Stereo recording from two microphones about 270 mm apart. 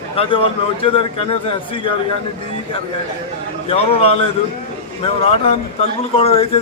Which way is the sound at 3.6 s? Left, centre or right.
Left.